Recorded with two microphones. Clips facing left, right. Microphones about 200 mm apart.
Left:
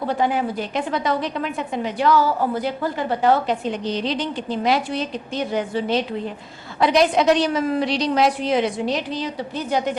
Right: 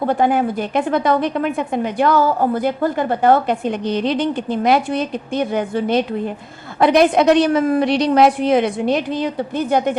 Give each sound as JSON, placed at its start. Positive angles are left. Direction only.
{"t": 0.0, "sound": "a woman's voice", "side_deg": -55}